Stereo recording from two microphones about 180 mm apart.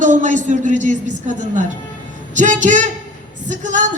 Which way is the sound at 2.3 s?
45° right (ahead or behind).